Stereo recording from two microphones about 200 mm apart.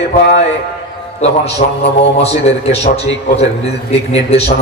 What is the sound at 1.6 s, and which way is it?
Music, 35° left (ahead or behind).